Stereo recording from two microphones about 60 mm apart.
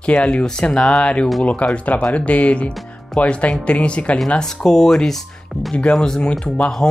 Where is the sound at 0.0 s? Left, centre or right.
Centre.